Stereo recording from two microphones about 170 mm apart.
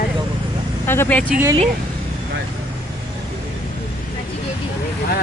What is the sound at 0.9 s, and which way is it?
Speech, 10° left (ahead or behind).